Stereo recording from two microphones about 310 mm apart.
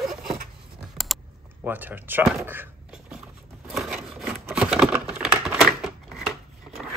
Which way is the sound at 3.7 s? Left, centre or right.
Centre.